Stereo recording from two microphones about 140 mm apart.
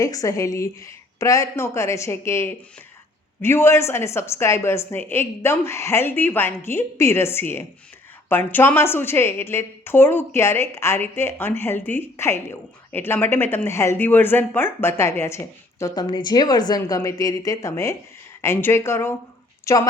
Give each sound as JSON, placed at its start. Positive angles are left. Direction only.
{"t": 0.0, "sound": "a woman's voice", "side_deg": 25}